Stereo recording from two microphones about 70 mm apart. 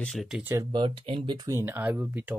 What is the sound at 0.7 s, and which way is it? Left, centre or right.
Speech, right.